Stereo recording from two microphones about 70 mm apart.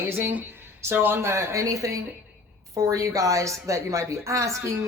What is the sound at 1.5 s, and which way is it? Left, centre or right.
Speech, right.